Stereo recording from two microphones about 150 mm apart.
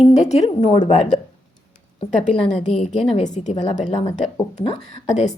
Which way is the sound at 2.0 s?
55° left (ahead or behind).